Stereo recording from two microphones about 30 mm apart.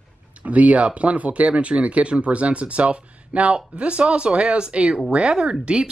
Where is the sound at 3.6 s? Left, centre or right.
Right.